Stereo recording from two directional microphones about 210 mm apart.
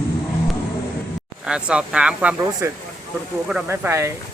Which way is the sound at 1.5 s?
5° right (ahead or behind).